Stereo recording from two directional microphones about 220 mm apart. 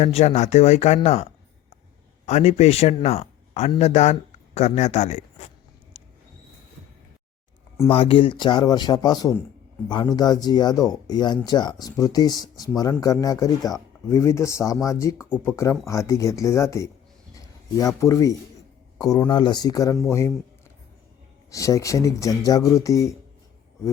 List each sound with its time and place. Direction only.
0.0 s speech: 30° left (ahead or behind)
7.9 s speech: 25° left (ahead or behind)
21.5 s speech: 15° left (ahead or behind)